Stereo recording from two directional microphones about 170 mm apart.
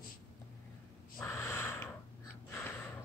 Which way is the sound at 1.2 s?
10° left (ahead or behind).